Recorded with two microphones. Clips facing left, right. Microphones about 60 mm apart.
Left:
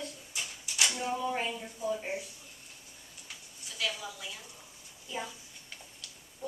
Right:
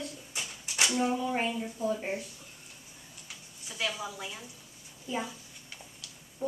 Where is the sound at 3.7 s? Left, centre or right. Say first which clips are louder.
Right 2 dB; right.